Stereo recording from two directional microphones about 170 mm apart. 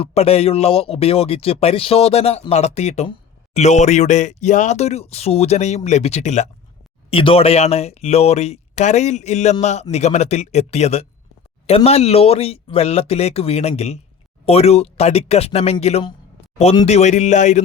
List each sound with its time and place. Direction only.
0.0 s speech: 35° left (ahead or behind)
7.1 s speech: 30° left (ahead or behind)